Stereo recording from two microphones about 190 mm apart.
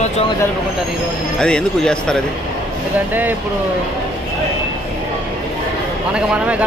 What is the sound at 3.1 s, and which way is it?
Speech, 10° right (ahead or behind).